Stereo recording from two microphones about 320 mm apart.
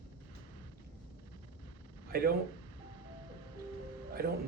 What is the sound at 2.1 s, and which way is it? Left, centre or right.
Speech, right.